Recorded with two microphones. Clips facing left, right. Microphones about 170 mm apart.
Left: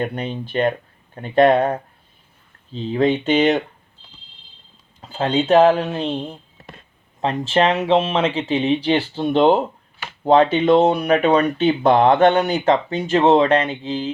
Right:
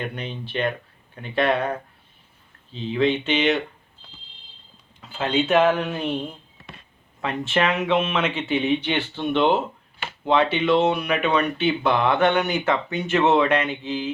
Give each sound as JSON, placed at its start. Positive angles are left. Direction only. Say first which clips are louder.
{"t": 0.0, "sound": "speech", "louder": "left 6 dB", "side_deg": 45}
{"t": 2.7, "sound": "speech", "louder": "left 3 dB", "side_deg": 40}
{"t": 4.9, "sound": "speech", "louder": "left 3 dB", "side_deg": 35}
{"t": 7.2, "sound": "speech", "louder": "left 5 dB", "side_deg": 35}